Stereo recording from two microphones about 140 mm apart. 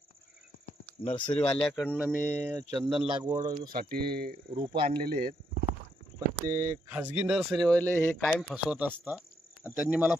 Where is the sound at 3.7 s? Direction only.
90° right.